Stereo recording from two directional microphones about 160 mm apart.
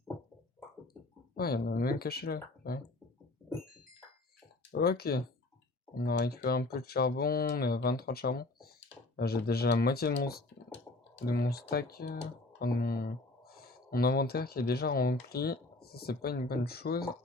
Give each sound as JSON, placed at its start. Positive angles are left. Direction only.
{"t": 1.4, "sound": "speech", "side_deg": 70}
{"t": 4.7, "sound": "speech", "side_deg": 75}